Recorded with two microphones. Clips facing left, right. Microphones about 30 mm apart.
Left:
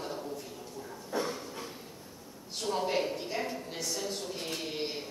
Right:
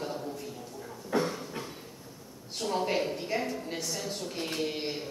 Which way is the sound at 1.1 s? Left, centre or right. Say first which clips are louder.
Right 5 dB; right.